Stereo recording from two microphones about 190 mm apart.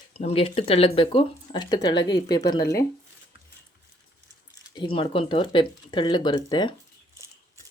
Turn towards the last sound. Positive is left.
turn(degrees=25)  # may be behind; listen again after turning